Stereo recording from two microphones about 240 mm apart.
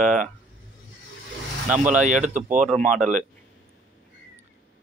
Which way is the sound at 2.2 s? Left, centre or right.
Right.